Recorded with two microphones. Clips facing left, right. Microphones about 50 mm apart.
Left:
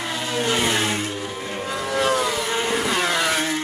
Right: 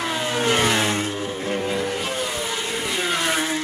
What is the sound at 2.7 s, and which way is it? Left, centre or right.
Vehicle, left.